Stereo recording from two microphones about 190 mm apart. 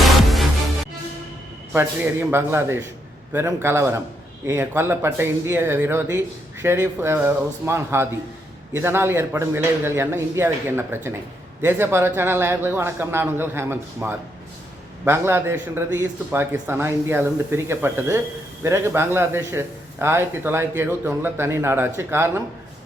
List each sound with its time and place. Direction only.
0.0 s music: centre (ahead or behind)
1.7 s a man's voice: 10° right (ahead or behind)